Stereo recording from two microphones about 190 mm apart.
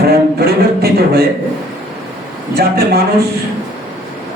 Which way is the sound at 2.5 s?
55° right (ahead or behind).